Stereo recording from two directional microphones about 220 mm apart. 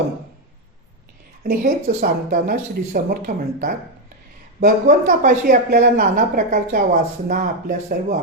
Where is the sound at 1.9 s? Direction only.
35° right (ahead or behind).